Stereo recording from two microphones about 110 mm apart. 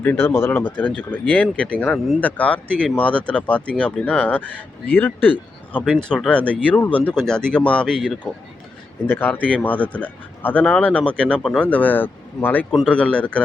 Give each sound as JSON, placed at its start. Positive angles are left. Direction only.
{"t": 0.0, "sound": "speech", "side_deg": 15}
{"t": 5.7, "sound": "speech", "side_deg": 5}
{"t": 9.0, "sound": "speech", "side_deg": 15}